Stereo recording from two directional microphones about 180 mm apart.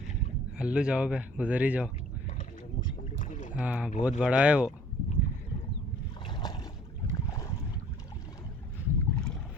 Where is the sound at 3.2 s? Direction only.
45° left (ahead or behind).